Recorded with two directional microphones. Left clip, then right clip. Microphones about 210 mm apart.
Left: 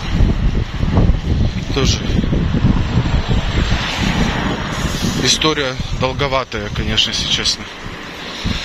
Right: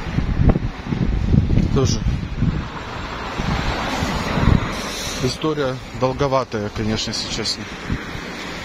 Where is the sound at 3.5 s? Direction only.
55° right (ahead or behind).